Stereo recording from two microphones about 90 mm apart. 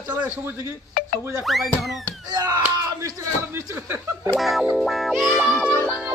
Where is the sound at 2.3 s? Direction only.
45° right (ahead or behind).